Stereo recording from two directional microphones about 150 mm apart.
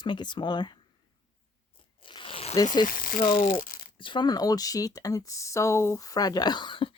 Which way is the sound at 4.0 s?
30° left (ahead or behind).